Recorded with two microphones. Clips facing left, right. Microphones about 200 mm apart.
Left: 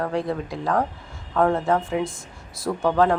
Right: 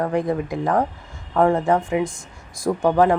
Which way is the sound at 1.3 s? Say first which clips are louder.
Right 3 dB; 15° right (ahead or behind).